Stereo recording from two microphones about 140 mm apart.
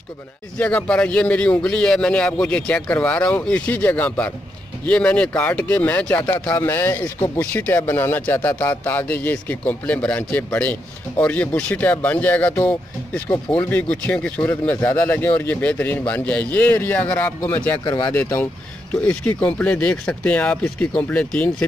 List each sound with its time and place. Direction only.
0.6 s speech: 10° left (ahead or behind)
17.8 s speech: 30° left (ahead or behind)
18.1 s speech: 15° left (ahead or behind)